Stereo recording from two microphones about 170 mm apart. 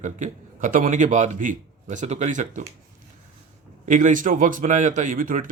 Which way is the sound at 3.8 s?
50° right (ahead or behind).